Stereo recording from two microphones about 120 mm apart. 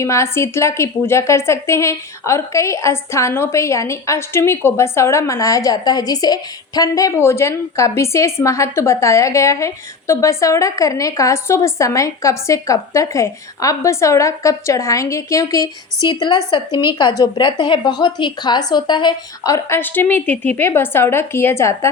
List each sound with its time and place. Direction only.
0.0 s a woman's voice: 25° left (ahead or behind); by 19.5 s 40° left (ahead or behind)
19.5 s a woman's voice: 20° left (ahead or behind)